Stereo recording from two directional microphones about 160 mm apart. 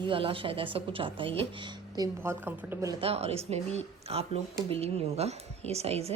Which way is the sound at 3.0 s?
40° right (ahead or behind).